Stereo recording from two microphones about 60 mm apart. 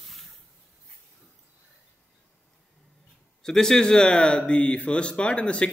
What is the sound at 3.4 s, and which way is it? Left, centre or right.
Speech, centre.